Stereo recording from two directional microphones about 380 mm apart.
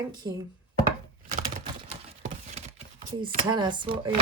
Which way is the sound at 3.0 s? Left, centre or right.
Centre.